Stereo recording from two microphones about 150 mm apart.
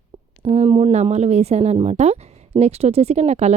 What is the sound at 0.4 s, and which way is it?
Speech, 45° right (ahead or behind).